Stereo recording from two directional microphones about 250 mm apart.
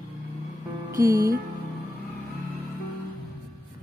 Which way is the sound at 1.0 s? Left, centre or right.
Centre.